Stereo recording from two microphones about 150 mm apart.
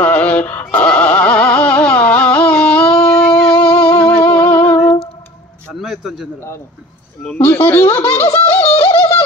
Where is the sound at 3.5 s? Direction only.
35° left (ahead or behind).